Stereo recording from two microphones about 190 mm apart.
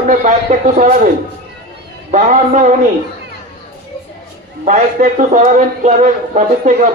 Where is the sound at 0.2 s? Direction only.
40° right (ahead or behind).